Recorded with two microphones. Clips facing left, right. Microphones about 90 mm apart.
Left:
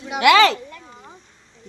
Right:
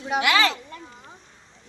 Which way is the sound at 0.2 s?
80° left.